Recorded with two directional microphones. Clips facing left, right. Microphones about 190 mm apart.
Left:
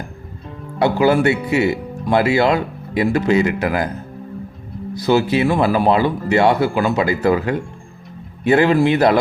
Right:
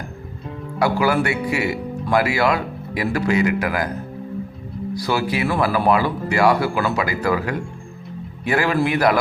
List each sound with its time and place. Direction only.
0.8 s speech: 25° left (ahead or behind)
4.9 s speech: 25° left (ahead or behind)